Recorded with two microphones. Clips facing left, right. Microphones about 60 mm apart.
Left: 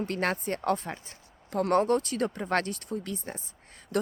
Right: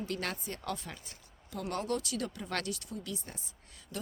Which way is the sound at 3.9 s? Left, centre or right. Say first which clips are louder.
Left 12 dB; left.